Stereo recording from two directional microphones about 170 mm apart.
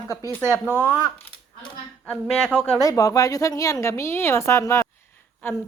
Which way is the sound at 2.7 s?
20° left (ahead or behind).